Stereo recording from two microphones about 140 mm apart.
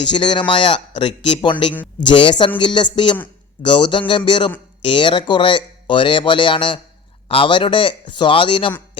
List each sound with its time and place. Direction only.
0.0 s speech: 35° left (ahead or behind)